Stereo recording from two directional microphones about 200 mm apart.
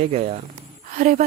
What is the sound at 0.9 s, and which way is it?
Speech, 45° right (ahead or behind).